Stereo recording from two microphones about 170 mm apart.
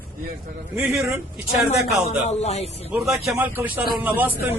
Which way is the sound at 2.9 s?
5° right (ahead or behind).